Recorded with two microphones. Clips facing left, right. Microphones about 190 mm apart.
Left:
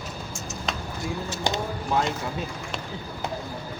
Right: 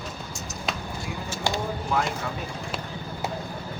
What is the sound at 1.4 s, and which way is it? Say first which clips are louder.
Vehicle: right 1 dB; 20° left (ahead or behind).